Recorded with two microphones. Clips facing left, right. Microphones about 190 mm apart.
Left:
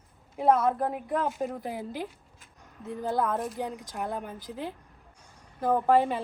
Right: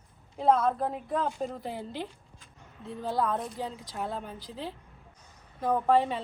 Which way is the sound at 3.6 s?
15° left (ahead or behind).